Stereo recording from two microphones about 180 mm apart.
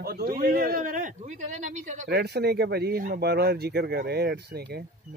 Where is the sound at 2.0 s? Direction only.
60° right (ahead or behind).